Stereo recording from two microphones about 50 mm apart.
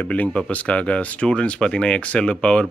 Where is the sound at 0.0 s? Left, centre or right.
Left.